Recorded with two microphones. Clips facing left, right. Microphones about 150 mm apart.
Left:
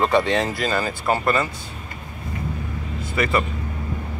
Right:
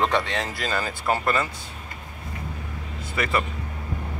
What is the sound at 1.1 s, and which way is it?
Speech, 35° left (ahead or behind).